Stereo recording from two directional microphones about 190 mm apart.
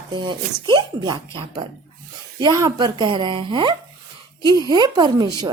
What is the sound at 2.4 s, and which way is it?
Speech, 15° right (ahead or behind).